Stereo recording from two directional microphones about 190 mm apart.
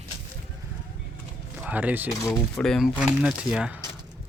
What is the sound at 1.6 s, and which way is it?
Speech, 5° right (ahead or behind).